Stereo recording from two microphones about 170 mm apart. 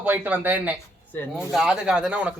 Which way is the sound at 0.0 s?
10° right (ahead or behind).